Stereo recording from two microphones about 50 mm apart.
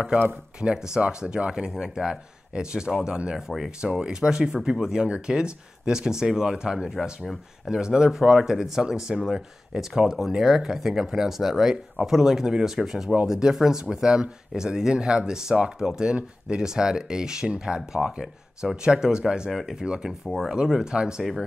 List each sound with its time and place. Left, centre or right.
0.6 s speech: centre
3.8 s speech: centre
19.5 s speech: centre
19.8 s speech: centre
20.2 s speech: centre
20.9 s speech: centre
21.2 s speech: centre